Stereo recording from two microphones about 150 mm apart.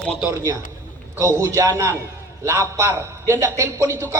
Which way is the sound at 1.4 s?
20° right (ahead or behind).